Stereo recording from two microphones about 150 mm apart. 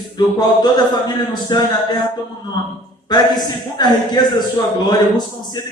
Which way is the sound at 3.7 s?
30° left (ahead or behind).